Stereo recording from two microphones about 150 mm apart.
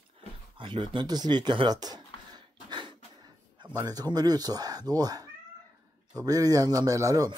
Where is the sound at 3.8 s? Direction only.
25° right (ahead or behind).